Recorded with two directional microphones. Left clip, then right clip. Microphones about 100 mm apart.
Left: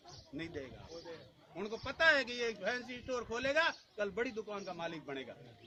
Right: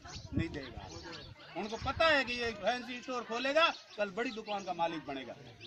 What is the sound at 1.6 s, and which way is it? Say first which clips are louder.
A man's voice: right 1 dB; 20° left (ahead or behind).